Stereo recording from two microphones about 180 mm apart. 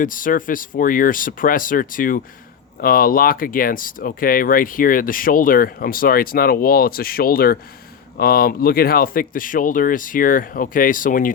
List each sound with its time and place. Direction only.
0.0 s speech: 50° left (ahead or behind)